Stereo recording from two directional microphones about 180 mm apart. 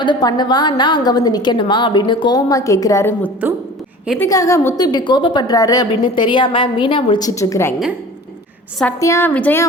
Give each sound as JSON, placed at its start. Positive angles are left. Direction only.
{"t": 0.0, "sound": "a woman's voice", "side_deg": 25}
{"t": 9.0, "sound": "a woman's voice", "side_deg": 15}